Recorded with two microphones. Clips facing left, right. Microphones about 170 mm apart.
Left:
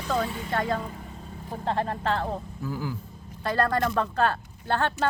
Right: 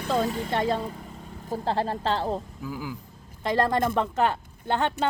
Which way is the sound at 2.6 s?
10° right (ahead or behind).